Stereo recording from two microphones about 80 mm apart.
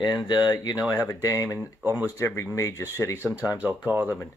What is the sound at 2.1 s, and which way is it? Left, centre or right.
Speech, left.